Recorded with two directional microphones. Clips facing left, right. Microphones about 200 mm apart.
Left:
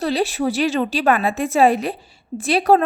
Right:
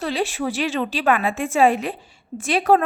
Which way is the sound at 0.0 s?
40° left (ahead or behind).